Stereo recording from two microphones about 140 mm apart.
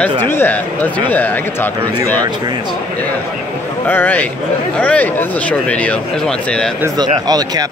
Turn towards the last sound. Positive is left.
turn(degrees=-30)  # may be behind; listen again after turning